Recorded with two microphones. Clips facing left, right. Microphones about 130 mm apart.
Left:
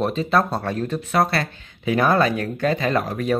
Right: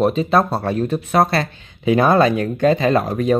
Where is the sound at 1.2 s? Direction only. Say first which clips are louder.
Right 3 dB; 25° right (ahead or behind).